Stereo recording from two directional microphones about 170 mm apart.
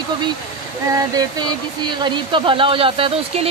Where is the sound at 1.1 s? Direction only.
25° right (ahead or behind).